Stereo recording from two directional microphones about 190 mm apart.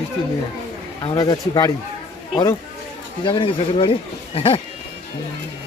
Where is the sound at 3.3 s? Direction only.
25° left (ahead or behind).